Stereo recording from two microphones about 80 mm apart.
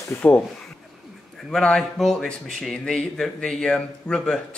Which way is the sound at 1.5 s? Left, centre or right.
Centre.